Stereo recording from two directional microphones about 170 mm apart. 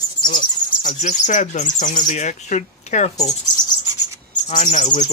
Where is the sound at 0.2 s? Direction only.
25° left (ahead or behind).